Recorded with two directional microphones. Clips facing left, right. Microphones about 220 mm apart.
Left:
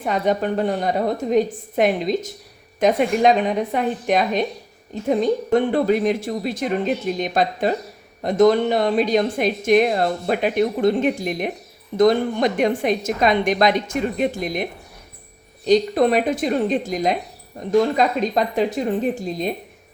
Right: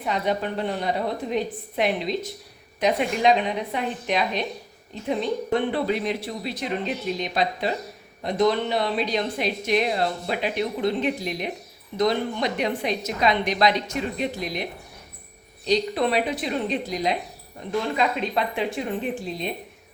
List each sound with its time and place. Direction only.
0.0 s a woman's voice: 45° left (ahead or behind)